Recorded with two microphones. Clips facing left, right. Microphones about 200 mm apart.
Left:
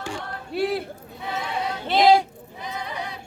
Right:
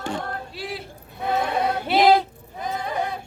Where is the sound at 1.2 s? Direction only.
55° right (ahead or behind).